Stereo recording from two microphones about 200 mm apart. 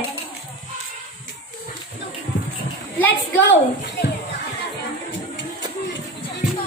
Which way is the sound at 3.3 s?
70° left (ahead or behind).